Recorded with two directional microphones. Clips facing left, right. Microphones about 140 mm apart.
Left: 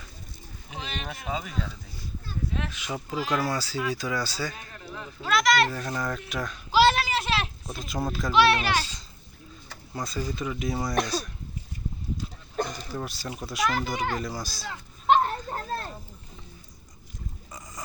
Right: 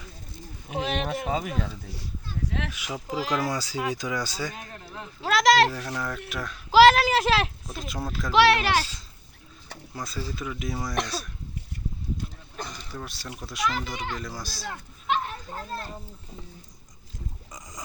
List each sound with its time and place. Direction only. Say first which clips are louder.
0.7 s speech: right 9 dB; 70° right (ahead or behind); by 1.6 s 50° right (ahead or behind)
2.5 s speech: right 1 dB; 90° right
2.7 s speech: even; 10° right (ahead or behind)
5.2 s speech: right 3 dB; 90° right
5.9 s speech: left 1 dB; centre (ahead or behind)
6.7 s a sound: right 5 dB; 90° right
7.7 s speech: left 3 dB; centre (ahead or behind)
8.3 s speech: right 2 dB; 90° right
9.9 s speech: left 3 dB; centre (ahead or behind)
12.5 s a sound: left 8 dB; 50° left (ahead or behind)
13.1 s speech: left 3 dB; centre (ahead or behind)
13.7 s a child's voice: even; 50° left (ahead or behind)
14.2 s speech: left 3 dB; centre (ahead or behind)
15.0 s children playing: left 7 dB; 50° left (ahead or behind)